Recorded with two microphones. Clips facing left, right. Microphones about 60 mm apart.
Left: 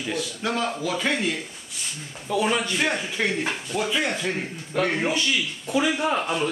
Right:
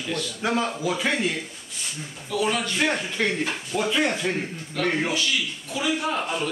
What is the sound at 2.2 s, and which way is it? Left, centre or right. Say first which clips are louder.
Speech: left 2 dB; left.